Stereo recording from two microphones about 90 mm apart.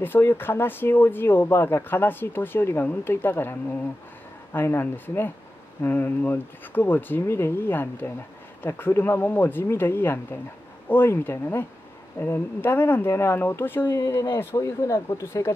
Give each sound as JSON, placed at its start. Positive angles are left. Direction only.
{"t": 0.0, "sound": "speech", "side_deg": 25}